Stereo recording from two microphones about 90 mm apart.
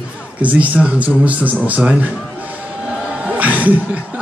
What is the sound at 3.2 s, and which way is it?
Music, 15° right (ahead or behind).